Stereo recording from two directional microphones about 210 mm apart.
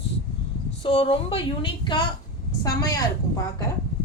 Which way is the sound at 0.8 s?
25° left (ahead or behind).